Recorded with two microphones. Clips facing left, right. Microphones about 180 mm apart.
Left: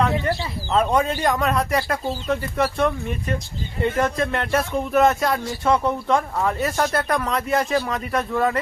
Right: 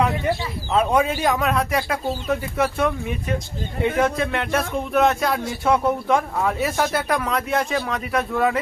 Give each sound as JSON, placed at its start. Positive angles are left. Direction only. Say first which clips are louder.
{"t": 0.3, "sound": "a man's voice", "louder": "right 1 dB", "side_deg": -5}